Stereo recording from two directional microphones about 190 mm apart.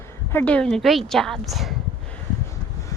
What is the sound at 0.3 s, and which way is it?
A woman's voice, 5° left (ahead or behind).